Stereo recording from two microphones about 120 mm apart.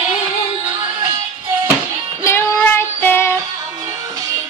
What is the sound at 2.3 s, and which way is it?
Child singing, 20° left (ahead or behind).